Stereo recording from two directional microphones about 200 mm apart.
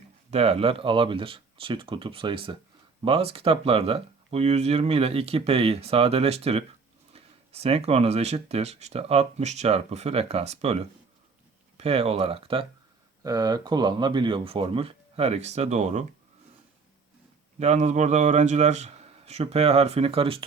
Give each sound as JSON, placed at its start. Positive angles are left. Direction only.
{"t": 0.3, "sound": "speech", "side_deg": -30}
{"t": 17.6, "sound": "speech", "side_deg": -35}